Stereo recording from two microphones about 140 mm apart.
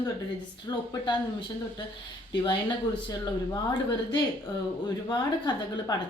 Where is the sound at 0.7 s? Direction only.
25° left (ahead or behind).